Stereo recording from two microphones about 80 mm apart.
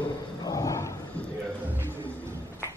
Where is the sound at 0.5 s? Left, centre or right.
Left.